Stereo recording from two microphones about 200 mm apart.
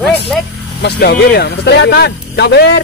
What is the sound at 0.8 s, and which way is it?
Speech, 55° left (ahead or behind).